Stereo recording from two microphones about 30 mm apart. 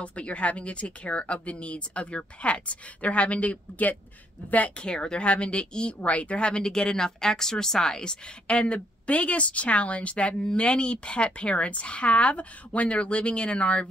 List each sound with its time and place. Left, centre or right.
0.0 s a woman's voice: left
4.8 s speech: left
5.2 s a woman's voice: left
6.0 s speech: left
8.5 s speech: left
10.4 s a woman's voice: left